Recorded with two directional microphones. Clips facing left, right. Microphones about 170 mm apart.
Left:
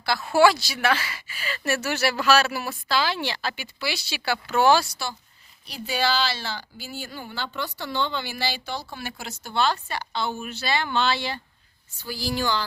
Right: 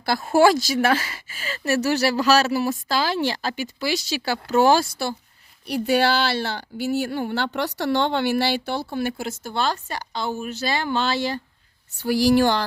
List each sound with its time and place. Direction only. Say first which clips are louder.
0.0 s speech: right 2 dB; 50° right (ahead or behind)
5.6 s a woman's voice: right 7 dB; 65° right (ahead or behind); by 11.3 s 40° right (ahead or behind)
11.9 s speech: right 11 dB; 75° right (ahead or behind)